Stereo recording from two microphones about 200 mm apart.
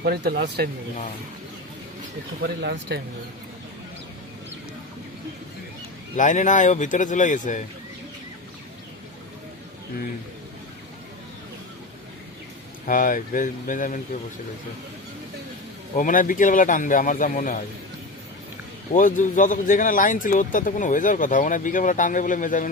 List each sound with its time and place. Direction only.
0.0 s speech: 55° right (ahead or behind)
2.4 s speech: 55° right (ahead or behind)
6.1 s speech: 40° left (ahead or behind)
12.9 s speech: 45° left (ahead or behind)
16.0 s speech: 40° left (ahead or behind)
18.9 s speech: 40° left (ahead or behind)